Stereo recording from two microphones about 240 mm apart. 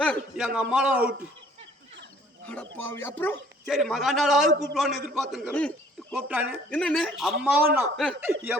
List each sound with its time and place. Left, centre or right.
0.0 s a man's voice: centre
2.7 s a man's voice: centre
6.1 s a man's voice: centre